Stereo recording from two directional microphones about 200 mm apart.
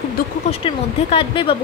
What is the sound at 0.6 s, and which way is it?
Speech, 25° left (ahead or behind).